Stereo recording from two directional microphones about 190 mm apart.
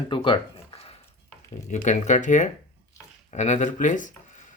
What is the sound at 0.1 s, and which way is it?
Zipper, 25° left (ahead or behind).